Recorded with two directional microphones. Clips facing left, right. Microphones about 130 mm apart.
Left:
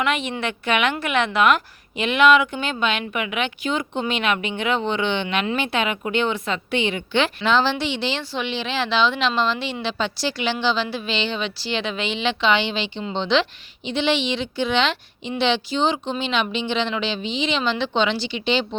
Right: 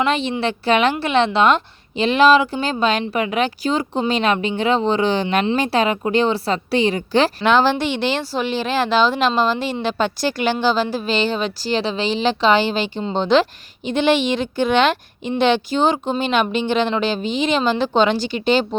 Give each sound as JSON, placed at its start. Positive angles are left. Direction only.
{"t": 0.0, "sound": "a woman's voice", "side_deg": -30}
{"t": 7.4, "sound": "speech", "side_deg": -50}